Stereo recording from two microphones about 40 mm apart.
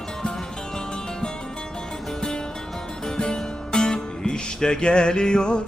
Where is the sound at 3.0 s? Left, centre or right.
Centre.